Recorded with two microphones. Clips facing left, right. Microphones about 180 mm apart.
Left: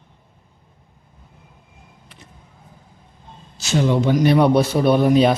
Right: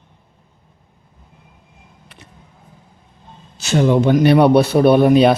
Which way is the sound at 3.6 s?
55° right (ahead or behind).